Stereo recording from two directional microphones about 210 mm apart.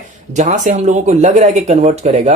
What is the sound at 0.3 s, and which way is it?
Speech, 35° right (ahead or behind).